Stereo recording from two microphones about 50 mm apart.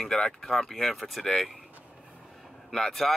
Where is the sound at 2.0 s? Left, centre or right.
Centre.